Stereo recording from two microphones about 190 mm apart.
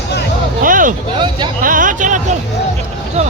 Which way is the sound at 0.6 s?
45° right (ahead or behind).